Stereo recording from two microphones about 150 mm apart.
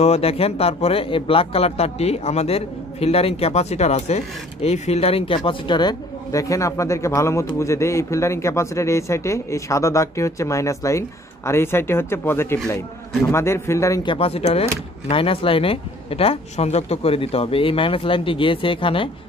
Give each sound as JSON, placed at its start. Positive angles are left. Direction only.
{"t": 0.0, "sound": "a man's voice", "side_deg": 40}
{"t": 14.0, "sound": "speech", "side_deg": 40}